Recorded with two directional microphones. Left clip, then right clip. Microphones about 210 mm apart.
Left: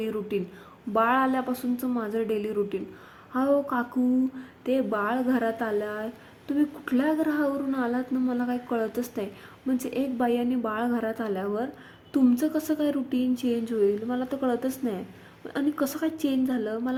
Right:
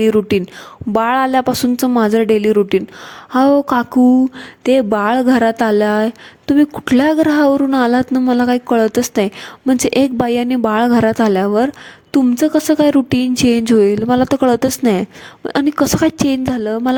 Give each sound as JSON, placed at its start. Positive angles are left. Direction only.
{"t": 0.0, "sound": "a woman's voice", "side_deg": -45}